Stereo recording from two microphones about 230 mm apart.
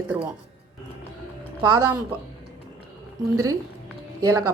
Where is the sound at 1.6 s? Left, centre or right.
Centre.